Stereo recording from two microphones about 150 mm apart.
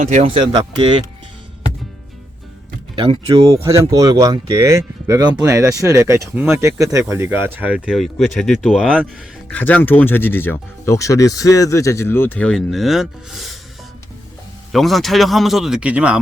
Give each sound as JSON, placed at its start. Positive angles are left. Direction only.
{"t": 0.0, "sound": "speech", "side_deg": -50}
{"t": 0.3, "sound": "speech", "side_deg": -30}
{"t": 2.9, "sound": "speech", "side_deg": -30}
{"t": 3.5, "sound": "speech", "side_deg": -20}
{"t": 9.5, "sound": "speech", "side_deg": 10}
{"t": 14.7, "sound": "speech", "side_deg": 0}